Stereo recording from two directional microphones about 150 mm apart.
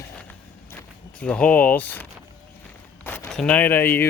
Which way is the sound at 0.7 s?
10° left (ahead or behind).